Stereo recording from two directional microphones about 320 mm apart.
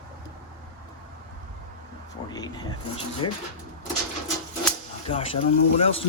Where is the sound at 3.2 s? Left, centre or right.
Left.